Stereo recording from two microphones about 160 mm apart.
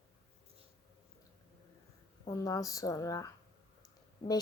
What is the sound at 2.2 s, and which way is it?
A woman's voice, 20° left (ahead or behind).